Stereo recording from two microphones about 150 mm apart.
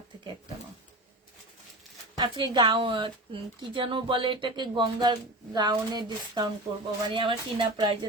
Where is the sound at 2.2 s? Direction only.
30° right (ahead or behind).